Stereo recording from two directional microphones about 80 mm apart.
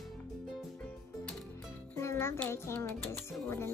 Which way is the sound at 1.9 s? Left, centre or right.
Left.